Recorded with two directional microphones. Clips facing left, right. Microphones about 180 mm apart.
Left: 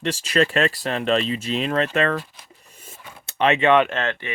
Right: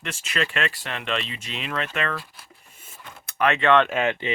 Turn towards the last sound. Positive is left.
turn(degrees=-15)  # may be behind; listen again after turning